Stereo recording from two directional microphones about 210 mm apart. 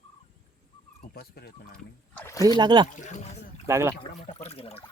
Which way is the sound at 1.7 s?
10° left (ahead or behind).